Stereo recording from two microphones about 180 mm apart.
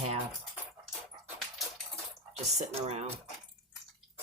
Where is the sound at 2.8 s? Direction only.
35° right (ahead or behind).